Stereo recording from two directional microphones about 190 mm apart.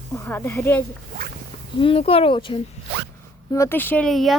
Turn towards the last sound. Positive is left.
turn(degrees=0)  # may be behind; listen again after turning